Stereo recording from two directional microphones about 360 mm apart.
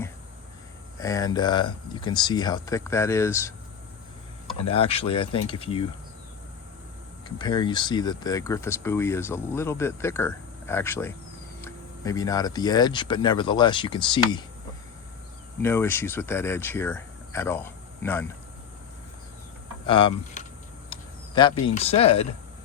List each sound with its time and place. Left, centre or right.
0.9 s speech: centre
7.3 s speech: centre
15.6 s speech: centre
19.9 s speech: centre
20.9 s a sound: centre
21.8 s speech: centre